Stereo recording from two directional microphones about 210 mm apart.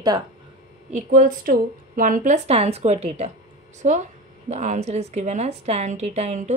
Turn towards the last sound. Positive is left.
turn(degrees=-35)  # may be behind; listen again after turning